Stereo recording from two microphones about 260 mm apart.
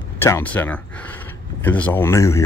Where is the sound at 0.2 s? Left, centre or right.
Centre.